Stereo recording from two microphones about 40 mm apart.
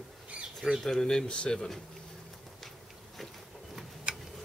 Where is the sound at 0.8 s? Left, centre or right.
Centre.